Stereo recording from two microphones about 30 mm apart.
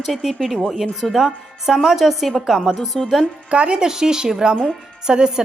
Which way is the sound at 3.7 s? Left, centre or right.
Right.